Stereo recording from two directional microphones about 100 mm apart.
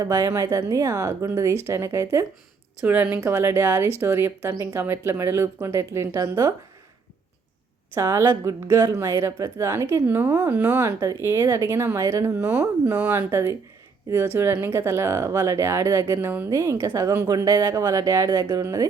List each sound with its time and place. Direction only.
0.0 s a woman's voice: 35° right (ahead or behind)
2.8 s a woman's voice: 20° right (ahead or behind); by 6.5 s 35° right (ahead or behind)
7.9 s a woman's voice: 30° right (ahead or behind)
16.8 s speech: 35° right (ahead or behind)